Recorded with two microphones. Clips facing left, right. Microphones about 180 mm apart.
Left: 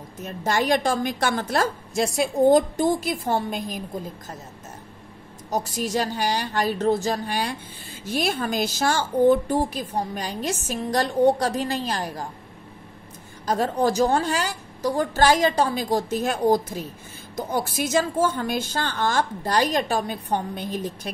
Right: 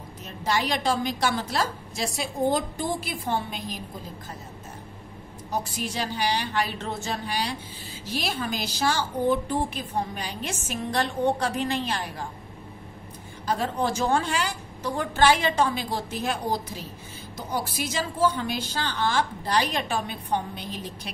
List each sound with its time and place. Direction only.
0.2 s a woman's voice: 50° left (ahead or behind)
5.5 s a woman's voice: 40° left (ahead or behind)
13.5 s a woman's voice: 40° left (ahead or behind)